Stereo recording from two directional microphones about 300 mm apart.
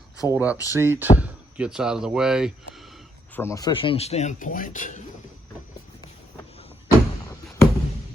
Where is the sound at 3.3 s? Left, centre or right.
Centre; by 5.0 s left.